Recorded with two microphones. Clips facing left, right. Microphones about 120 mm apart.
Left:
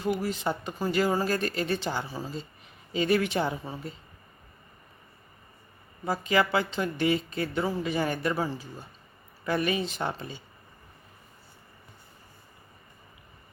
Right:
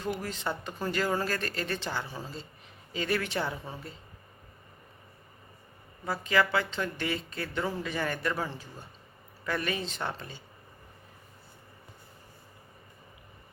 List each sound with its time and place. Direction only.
0.0 s speech: 10° left (ahead or behind)
6.1 s speech: 15° left (ahead or behind)
9.5 s speech: 15° left (ahead or behind)